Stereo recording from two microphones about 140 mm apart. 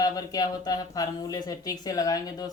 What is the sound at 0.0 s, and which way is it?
Speech, 25° left (ahead or behind).